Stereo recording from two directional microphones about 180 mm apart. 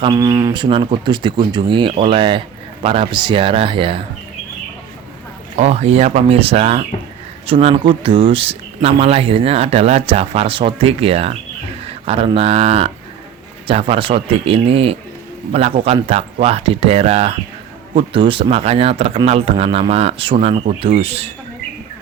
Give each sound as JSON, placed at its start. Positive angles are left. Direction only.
{"t": 0.0, "sound": "speech", "side_deg": -20}
{"t": 5.5, "sound": "speech", "side_deg": -35}